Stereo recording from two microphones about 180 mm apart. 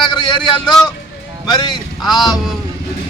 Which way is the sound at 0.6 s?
Centre (ahead or behind).